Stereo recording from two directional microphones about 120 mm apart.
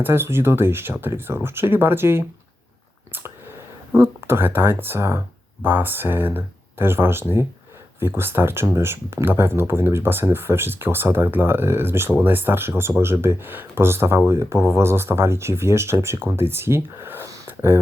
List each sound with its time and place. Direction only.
0.0 s speech: 20° right (ahead or behind)
3.9 s speech: 20° right (ahead or behind)